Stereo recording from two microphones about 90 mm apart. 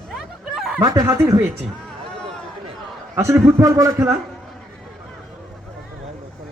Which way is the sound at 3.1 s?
30° right (ahead or behind).